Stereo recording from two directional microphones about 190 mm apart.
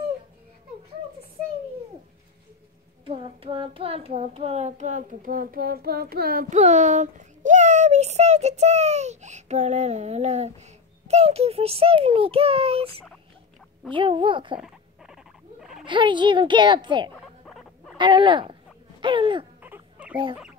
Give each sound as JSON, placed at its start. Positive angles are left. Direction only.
{"t": 3.1, "sound": "child singing", "side_deg": -30}
{"t": 11.1, "sound": "a child's voice", "side_deg": -35}
{"t": 15.8, "sound": "speech", "side_deg": -25}
{"t": 17.5, "sound": "rodents", "side_deg": 0}
{"t": 17.9, "sound": "a sound", "side_deg": -25}
{"t": 19.6, "sound": "a sound", "side_deg": -10}